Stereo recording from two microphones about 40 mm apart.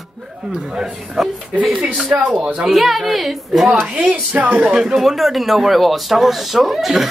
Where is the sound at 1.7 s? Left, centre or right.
Right.